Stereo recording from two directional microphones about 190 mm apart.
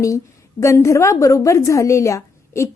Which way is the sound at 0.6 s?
15° left (ahead or behind).